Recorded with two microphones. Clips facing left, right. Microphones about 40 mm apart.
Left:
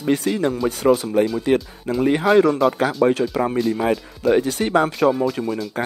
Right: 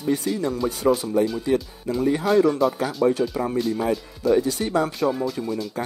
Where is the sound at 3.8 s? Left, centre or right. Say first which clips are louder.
Left 3 dB; left.